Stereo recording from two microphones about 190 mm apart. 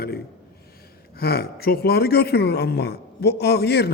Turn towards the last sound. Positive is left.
turn(degrees=60)  # may be behind; listen again after turning